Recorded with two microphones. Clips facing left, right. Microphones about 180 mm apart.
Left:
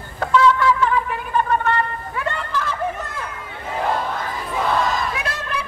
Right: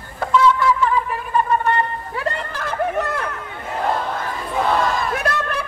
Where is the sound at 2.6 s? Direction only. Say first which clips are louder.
Right 5 dB; 55° right (ahead or behind).